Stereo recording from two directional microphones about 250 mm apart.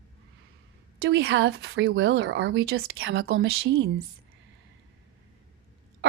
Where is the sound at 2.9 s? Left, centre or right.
Right.